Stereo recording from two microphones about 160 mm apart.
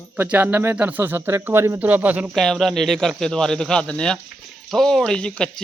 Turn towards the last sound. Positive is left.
turn(degrees=5)  # may be behind; listen again after turning